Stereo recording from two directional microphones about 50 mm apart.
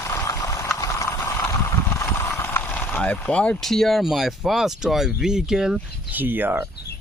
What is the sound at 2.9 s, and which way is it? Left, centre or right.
Vehicle, left.